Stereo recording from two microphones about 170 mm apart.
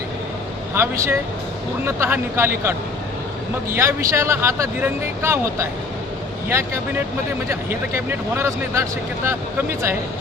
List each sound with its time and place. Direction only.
0.7 s speech: 15° right (ahead or behind)
3.8 s speech: 15° right (ahead or behind)